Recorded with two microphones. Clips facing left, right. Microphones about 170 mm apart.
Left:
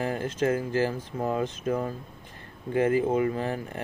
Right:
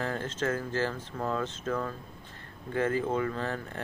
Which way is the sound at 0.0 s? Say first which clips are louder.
Left 5 dB; 15° left (ahead or behind).